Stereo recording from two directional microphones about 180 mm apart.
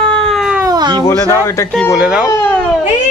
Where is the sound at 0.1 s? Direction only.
Centre (ahead or behind).